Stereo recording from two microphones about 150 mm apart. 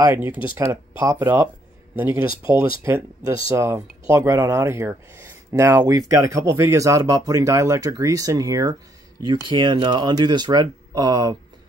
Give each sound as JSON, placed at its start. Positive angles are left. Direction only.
{"t": 0.0, "sound": "speech", "side_deg": -15}